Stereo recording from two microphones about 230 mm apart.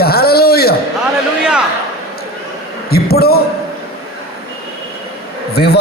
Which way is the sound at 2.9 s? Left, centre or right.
Left.